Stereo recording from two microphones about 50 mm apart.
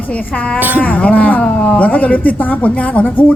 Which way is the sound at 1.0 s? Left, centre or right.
Left.